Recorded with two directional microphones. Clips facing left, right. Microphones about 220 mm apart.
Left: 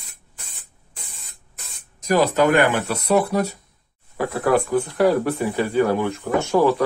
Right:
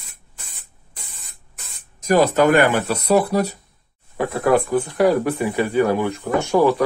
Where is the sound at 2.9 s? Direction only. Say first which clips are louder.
Right 2 dB; 35° right (ahead or behind).